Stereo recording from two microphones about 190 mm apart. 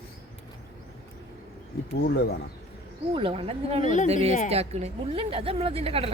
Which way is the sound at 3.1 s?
30° right (ahead or behind).